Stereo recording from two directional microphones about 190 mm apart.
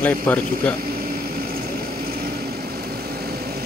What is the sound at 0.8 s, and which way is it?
Vehicle, 50° right (ahead or behind).